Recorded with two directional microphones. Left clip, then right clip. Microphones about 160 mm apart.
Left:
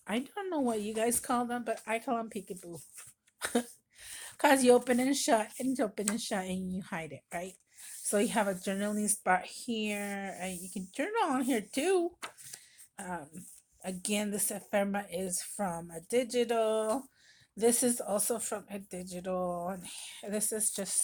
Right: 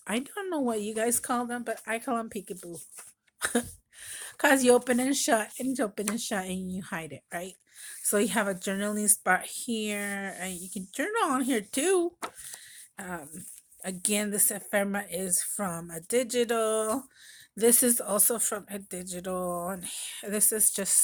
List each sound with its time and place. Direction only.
0.0 s speech: 35° right (ahead or behind)